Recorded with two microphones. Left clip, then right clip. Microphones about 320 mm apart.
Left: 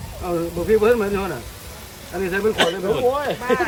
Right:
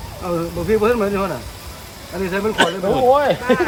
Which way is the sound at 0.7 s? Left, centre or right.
Centre.